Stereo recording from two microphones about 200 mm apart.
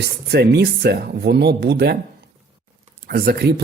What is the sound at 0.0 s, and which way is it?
Speech, 55° right (ahead or behind).